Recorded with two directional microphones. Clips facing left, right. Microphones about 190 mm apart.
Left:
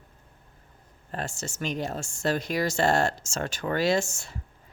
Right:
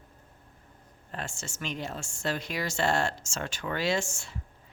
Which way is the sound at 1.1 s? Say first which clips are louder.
Left 5 dB; 40° left (ahead or behind).